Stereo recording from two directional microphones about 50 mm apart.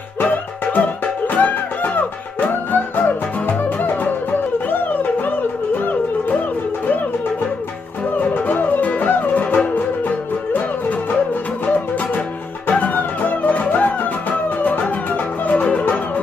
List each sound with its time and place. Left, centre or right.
0.2 s music: left
8.2 s music: left